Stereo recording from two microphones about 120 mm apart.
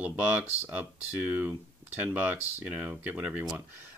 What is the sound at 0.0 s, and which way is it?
Speech, 10° right (ahead or behind).